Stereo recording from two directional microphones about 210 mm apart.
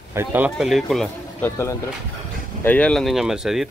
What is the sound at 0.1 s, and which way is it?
Speech, 10° right (ahead or behind).